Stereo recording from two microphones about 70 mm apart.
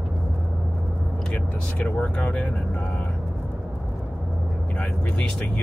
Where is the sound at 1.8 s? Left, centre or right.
Centre.